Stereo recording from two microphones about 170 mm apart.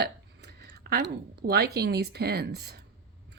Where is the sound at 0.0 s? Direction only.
75° right (ahead or behind).